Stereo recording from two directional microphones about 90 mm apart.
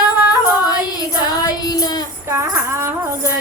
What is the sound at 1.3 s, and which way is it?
Child singing, 45° left (ahead or behind).